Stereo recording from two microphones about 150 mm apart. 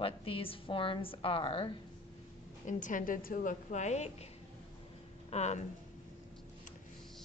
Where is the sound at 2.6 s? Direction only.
60° left (ahead or behind).